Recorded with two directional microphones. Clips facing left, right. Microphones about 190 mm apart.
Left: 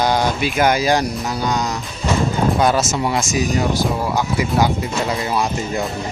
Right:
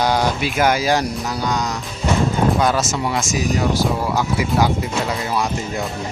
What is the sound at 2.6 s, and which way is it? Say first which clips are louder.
Speech: left 2 dB; 25° left (ahead or behind).